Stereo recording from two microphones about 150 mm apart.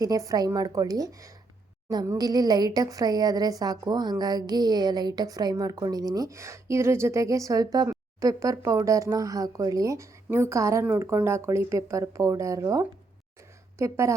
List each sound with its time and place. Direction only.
0.0 s a woman's voice: 25° right (ahead or behind)